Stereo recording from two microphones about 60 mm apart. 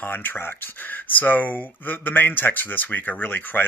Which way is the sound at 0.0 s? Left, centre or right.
Left.